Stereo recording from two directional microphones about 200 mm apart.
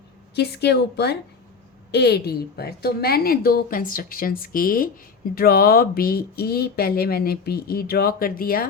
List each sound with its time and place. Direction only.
0.3 s a woman's voice: 55° left (ahead or behind)